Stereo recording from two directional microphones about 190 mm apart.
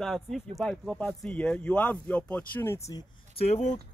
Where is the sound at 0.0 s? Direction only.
Centre (ahead or behind).